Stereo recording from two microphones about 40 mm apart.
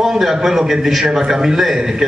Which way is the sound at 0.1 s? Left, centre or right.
Centre.